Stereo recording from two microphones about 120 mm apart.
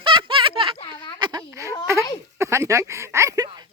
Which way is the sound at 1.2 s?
35° right (ahead or behind).